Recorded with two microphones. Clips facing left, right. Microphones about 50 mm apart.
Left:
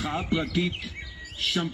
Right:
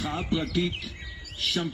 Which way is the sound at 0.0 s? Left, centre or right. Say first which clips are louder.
Left 1 dB; centre.